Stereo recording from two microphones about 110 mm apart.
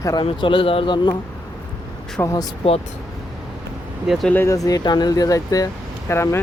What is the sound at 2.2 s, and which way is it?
Speech, 30° left (ahead or behind).